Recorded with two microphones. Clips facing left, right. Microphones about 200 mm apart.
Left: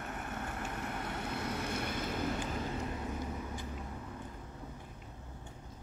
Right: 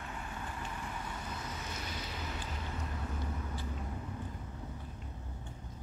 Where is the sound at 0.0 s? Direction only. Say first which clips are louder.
Left 3 dB; 50° left (ahead or behind).